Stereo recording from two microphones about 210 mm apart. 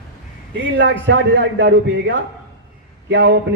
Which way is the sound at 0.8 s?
55° right (ahead or behind).